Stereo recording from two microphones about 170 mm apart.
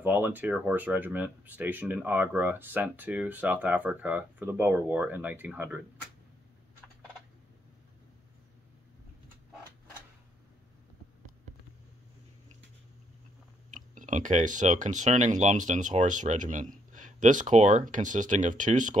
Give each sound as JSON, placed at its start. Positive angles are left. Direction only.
{"t": 0.0, "sound": "speech", "side_deg": -10}
{"t": 13.7, "sound": "speech", "side_deg": -50}